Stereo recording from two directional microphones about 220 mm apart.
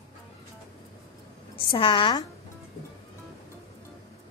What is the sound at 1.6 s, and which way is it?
Speech, 20° left (ahead or behind).